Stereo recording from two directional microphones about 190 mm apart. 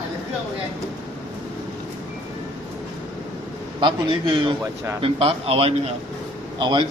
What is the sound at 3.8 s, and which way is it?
A man's voice, 25° right (ahead or behind).